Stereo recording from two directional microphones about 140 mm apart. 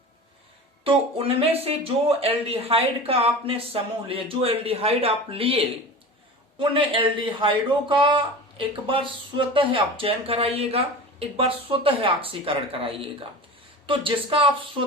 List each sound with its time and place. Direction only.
0.9 s speech: 45° right (ahead or behind)